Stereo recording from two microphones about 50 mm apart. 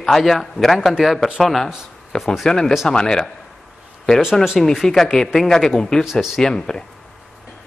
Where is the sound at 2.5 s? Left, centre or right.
Centre.